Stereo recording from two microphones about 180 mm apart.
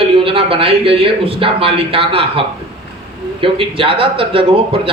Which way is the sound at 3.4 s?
30° right (ahead or behind).